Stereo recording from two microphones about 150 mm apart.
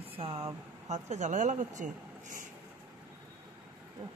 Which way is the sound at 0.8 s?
50° right (ahead or behind).